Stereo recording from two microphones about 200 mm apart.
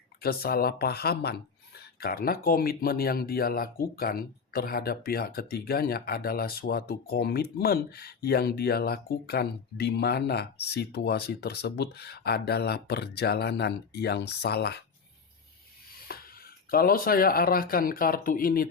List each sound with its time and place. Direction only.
0.2 s speech: 50° left (ahead or behind)
16.0 s speech: 50° left (ahead or behind)